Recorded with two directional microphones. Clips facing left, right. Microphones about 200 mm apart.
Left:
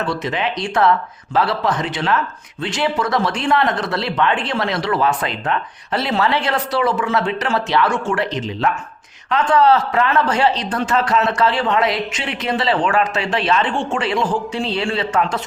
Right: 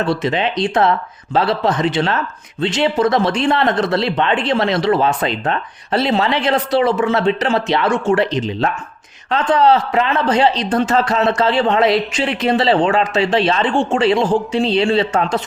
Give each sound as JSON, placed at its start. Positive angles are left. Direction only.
{"t": 0.0, "sound": "a man's voice", "side_deg": -30}
{"t": 9.3, "sound": "a man's voice", "side_deg": -20}